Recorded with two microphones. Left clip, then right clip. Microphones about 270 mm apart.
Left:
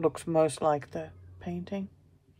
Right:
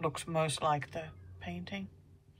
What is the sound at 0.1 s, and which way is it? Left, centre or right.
Speech, centre.